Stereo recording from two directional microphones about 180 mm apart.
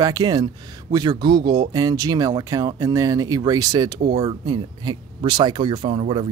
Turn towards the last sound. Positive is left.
turn(degrees=-30)  # may be behind; listen again after turning